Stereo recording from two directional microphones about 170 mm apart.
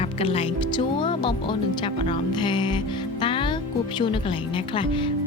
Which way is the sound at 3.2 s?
30° left (ahead or behind).